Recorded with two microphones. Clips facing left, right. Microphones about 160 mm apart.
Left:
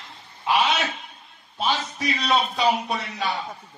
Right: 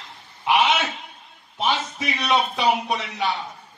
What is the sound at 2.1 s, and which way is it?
Speech, 20° right (ahead or behind).